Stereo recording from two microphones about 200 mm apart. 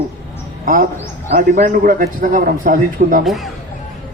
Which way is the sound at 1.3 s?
40° right (ahead or behind).